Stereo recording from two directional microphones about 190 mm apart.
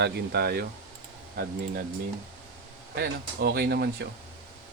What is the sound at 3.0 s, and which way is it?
Speech, 55° right (ahead or behind).